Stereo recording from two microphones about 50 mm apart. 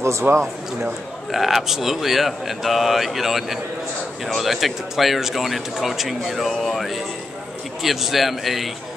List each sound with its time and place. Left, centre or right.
0.0 s speech: right
1.3 s a man's voice: centre